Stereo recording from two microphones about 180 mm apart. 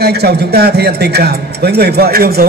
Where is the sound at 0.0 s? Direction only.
65° right (ahead or behind).